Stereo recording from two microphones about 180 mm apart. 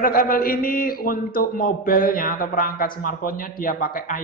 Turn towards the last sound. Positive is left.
turn(degrees=50)  # may be behind; listen again after turning